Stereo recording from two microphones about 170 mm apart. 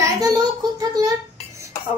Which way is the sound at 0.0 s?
20° right (ahead or behind).